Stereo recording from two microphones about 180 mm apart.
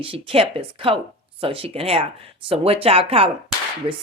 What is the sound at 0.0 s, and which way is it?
Speech, 30° right (ahead or behind).